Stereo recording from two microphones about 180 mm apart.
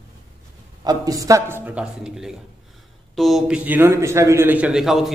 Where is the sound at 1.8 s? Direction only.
5° right (ahead or behind).